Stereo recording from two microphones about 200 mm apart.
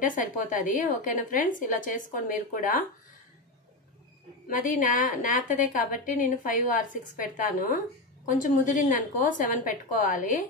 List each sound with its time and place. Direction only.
0.0 s a woman's voice: 40° left (ahead or behind)
4.5 s a woman's voice: 40° left (ahead or behind)